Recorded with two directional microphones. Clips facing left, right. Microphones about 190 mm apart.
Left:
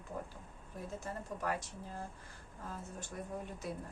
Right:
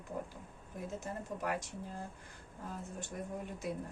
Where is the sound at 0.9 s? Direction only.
15° right (ahead or behind).